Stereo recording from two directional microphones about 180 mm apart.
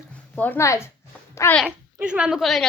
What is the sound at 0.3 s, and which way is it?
Speech, 10° left (ahead or behind).